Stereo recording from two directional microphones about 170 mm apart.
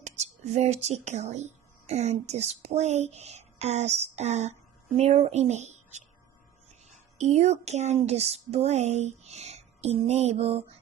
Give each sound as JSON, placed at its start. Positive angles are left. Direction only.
{"t": 0.0, "sound": "speech", "side_deg": -40}